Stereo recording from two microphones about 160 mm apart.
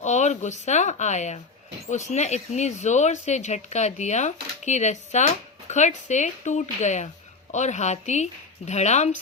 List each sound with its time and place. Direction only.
0.0 s speech: 45° left (ahead or behind)